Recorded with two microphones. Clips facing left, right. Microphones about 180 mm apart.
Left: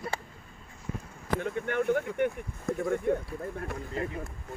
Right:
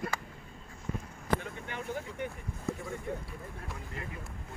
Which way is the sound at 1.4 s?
60° left (ahead or behind).